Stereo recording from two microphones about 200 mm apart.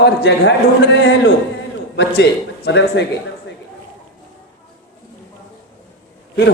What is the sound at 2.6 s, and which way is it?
Speech, 55° left (ahead or behind).